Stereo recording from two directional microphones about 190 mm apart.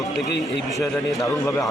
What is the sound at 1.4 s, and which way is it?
Speech, 20° left (ahead or behind).